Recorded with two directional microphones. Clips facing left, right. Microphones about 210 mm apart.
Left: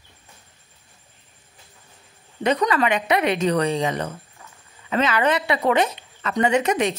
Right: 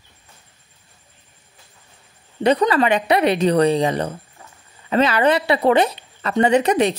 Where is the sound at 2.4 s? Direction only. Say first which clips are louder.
Right 4 dB; 35° right (ahead or behind).